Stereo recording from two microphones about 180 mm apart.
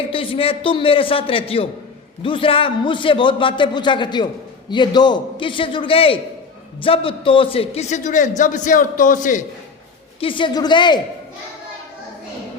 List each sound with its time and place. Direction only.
0.1 s a man's voice: 30° left (ahead or behind); by 9.4 s 45° left (ahead or behind)
10.2 s a man's voice: 30° left (ahead or behind)